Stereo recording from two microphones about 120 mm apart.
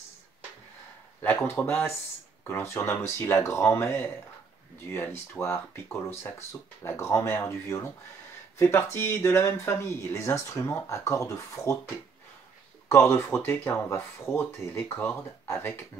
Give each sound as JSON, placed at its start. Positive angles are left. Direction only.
{"t": 1.2, "sound": "speech", "side_deg": 15}
{"t": 12.8, "sound": "speech", "side_deg": 20}